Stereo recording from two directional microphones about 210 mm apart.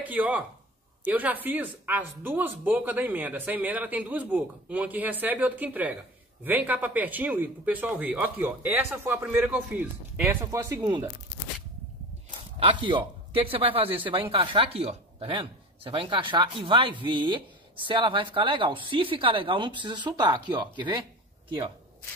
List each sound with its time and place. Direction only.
0.0 s speech: 10° right (ahead or behind)
12.3 s speech: 25° right (ahead or behind)